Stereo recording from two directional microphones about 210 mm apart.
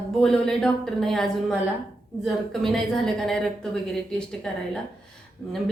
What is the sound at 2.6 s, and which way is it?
Speech, centre (ahead or behind).